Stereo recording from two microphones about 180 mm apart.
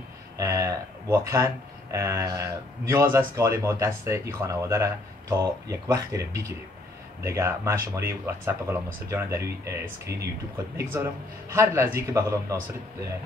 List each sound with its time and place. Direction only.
0.4 s speech: 15° right (ahead or behind)